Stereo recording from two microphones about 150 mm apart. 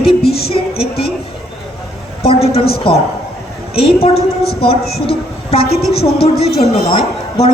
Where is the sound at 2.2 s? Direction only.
40° left (ahead or behind).